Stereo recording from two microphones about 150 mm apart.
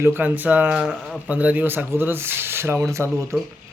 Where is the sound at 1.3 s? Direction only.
10° right (ahead or behind).